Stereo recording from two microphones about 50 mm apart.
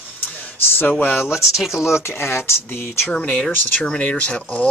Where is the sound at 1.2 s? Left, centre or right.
Centre.